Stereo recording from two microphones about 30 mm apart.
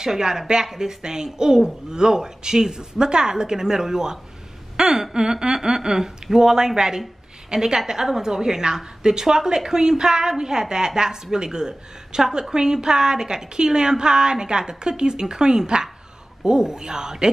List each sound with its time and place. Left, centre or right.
0.0 s a woman's voice: right
4.7 s a sound: centre
5.1 s a woman's voice: right